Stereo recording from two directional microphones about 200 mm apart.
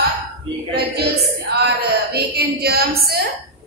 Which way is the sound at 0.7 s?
55° right (ahead or behind).